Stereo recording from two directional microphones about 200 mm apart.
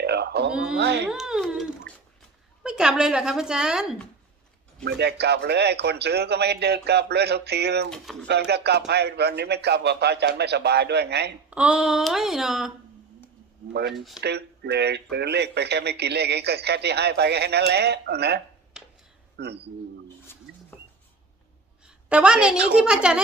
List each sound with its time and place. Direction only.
0.0 s a sound: 55° right (ahead or behind)
0.8 s a man's voice: 55° right (ahead or behind)
1.0 s a woman's voice: centre (ahead or behind)
4.9 s a man's voice: 55° right (ahead or behind)
7.9 s a woman's voice: 5° left (ahead or behind)
8.3 s a man's voice: 55° right (ahead or behind)
11.5 s a woman's voice: 5° right (ahead or behind)
13.9 s a woman's voice: centre (ahead or behind)
14.2 s a man's voice: 55° right (ahead or behind)
20.5 s a sound: 5° right (ahead or behind)
21.8 s a woman's voice: 5° right (ahead or behind)